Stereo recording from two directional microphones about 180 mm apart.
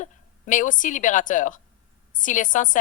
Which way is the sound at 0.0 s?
45° left (ahead or behind).